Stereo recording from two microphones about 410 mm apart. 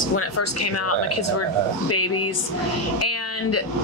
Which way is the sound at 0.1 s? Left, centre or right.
Left.